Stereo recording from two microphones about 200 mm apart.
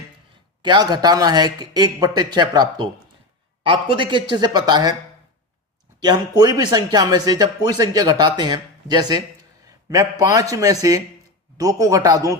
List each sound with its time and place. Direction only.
0.6 s speech: 20° right (ahead or behind)
6.0 s a man's voice: 20° right (ahead or behind)